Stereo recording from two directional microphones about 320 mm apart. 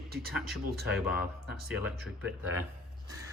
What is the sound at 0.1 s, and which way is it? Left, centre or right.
Speech, right.